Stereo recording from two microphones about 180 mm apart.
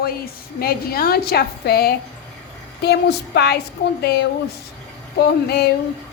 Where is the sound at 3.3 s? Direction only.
70° left (ahead or behind).